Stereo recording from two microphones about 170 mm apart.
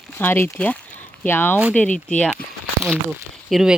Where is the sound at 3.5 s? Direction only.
5° right (ahead or behind).